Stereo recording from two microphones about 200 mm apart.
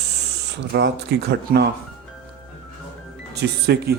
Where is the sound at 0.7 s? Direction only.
60° right (ahead or behind).